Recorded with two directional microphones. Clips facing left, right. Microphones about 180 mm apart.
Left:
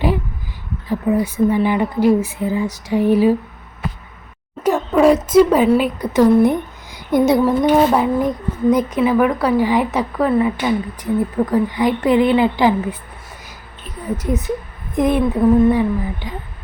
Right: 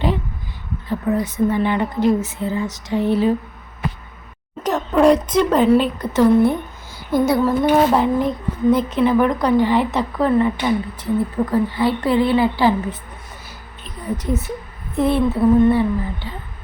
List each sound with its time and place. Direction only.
0.9 s speech: 10° left (ahead or behind)
4.6 s speech: 10° left (ahead or behind)
7.9 s speech: 5° left (ahead or behind)
13.8 s a sound: 10° left (ahead or behind)
14.9 s speech: 15° left (ahead or behind)